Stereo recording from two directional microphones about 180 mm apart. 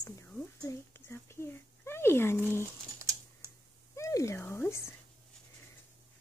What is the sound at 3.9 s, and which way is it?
Cat, 15° left (ahead or behind).